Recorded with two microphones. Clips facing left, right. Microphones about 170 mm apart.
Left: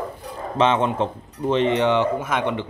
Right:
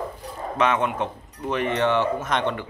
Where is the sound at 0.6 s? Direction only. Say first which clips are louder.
Left 3 dB; 30° left (ahead or behind); by 2.5 s 5° left (ahead or behind).